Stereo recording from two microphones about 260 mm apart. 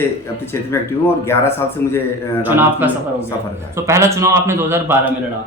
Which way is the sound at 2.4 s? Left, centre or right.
Centre.